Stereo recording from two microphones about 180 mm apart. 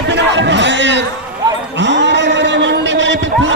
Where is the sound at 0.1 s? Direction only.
75° right (ahead or behind).